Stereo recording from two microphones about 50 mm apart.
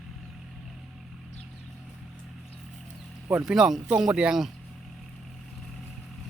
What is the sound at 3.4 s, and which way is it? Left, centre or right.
Speech, centre.